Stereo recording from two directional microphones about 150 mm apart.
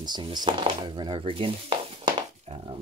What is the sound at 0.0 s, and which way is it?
Speech, 30° right (ahead or behind).